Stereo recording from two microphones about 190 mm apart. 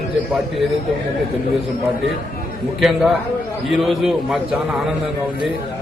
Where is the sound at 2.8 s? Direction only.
Centre (ahead or behind).